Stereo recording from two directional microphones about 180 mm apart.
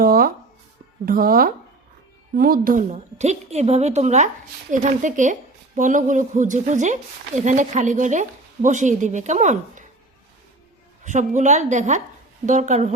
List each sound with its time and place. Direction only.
0.0 s a sound: 55° right (ahead or behind)
1.0 s a woman's voice: 55° right (ahead or behind)
11.0 s a woman's voice: 40° right (ahead or behind)